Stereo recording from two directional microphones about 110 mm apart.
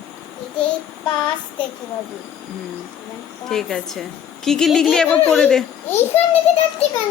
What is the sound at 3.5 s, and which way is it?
A woman's voice, 5° left (ahead or behind).